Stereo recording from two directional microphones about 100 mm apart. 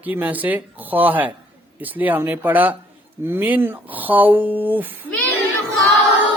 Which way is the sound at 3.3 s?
20° right (ahead or behind).